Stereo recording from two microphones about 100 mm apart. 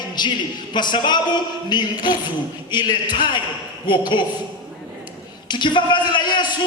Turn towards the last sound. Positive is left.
turn(degrees=50)  # may be behind; listen again after turning